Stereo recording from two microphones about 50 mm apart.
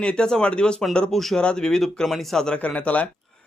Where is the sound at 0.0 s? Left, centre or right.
Centre.